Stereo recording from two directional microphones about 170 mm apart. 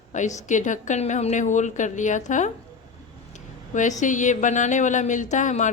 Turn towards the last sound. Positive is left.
turn(degrees=45)  # may be behind; listen again after turning